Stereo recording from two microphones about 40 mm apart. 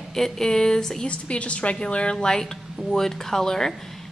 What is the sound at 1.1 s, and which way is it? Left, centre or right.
A woman's voice, left.